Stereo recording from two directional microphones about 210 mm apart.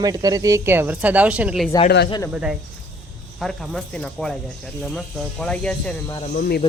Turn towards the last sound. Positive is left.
turn(degrees=45)  # may be behind; listen again after turning